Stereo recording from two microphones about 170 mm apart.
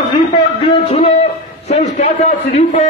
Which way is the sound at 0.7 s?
35° left (ahead or behind).